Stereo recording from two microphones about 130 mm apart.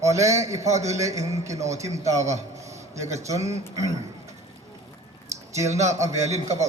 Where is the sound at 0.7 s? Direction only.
60° right (ahead or behind).